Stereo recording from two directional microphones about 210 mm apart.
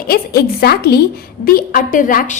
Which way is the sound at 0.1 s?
50° left (ahead or behind).